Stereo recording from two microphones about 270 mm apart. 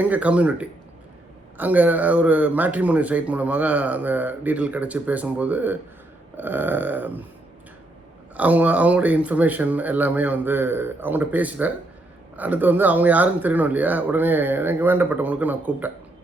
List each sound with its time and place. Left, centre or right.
0.0 s speech: centre
8.4 s speech: centre